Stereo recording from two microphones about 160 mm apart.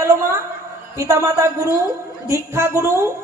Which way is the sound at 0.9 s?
15° right (ahead or behind).